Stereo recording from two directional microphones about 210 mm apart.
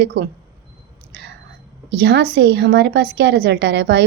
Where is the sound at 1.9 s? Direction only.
55° right (ahead or behind).